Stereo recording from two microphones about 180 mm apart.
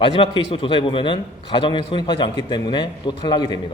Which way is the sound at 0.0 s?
30° left (ahead or behind).